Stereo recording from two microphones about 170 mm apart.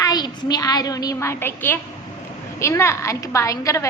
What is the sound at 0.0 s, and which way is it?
A woman's voice, 25° left (ahead or behind).